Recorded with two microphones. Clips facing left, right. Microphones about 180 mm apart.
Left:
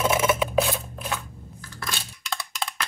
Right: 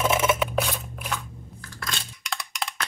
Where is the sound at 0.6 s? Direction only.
25° left (ahead or behind).